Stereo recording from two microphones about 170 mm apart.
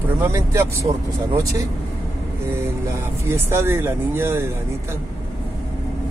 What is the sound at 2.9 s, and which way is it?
Speech, 15° right (ahead or behind).